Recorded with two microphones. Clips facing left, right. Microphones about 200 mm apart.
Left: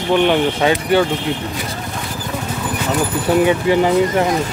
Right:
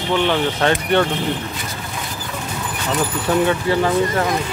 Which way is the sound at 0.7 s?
5° left (ahead or behind).